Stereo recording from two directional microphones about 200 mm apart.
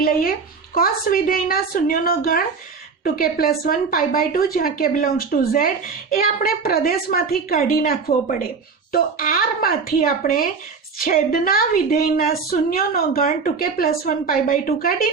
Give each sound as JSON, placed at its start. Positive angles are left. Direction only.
{"t": 0.0, "sound": "a woman's voice", "side_deg": 45}